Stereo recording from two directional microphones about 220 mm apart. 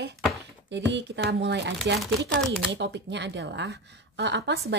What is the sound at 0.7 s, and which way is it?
Speech, 55° right (ahead or behind).